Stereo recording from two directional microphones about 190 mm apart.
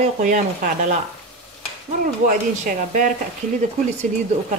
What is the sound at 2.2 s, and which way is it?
Speech, 45° right (ahead or behind).